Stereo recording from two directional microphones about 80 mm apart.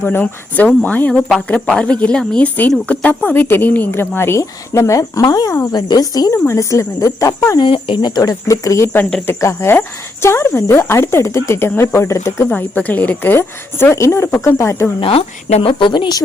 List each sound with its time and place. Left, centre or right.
0.0 s speech: left
6.3 s speech: left
7.6 s speech: left
12.5 s speech: centre
13.9 s speech: left
15.6 s speech: left